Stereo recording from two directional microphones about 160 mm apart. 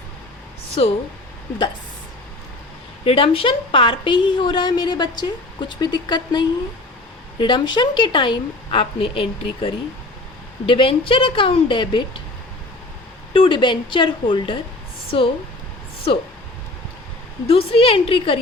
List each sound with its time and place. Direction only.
0.8 s a woman's voice: 35° left (ahead or behind)
3.0 s a woman's voice: 35° left (ahead or behind)
13.3 s a woman's voice: 30° left (ahead or behind)
17.4 s a woman's voice: 35° left (ahead or behind)